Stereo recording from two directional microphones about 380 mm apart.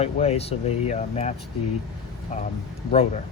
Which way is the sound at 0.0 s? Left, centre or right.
Centre.